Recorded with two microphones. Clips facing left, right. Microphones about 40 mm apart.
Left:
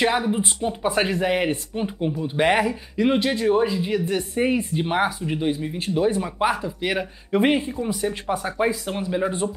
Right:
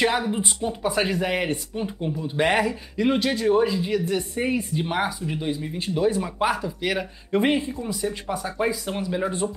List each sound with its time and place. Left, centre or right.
0.0 s speech: centre
0.4 s speech: left
1.8 s speech: left
7.4 s speech: left